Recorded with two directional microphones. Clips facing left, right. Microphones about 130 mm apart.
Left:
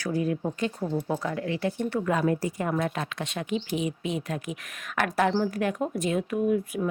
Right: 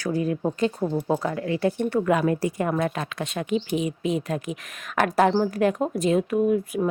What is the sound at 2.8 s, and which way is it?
Speech, 45° right (ahead or behind).